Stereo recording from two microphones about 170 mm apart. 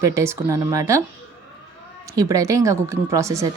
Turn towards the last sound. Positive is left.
turn(degrees=-15)  # may be behind; listen again after turning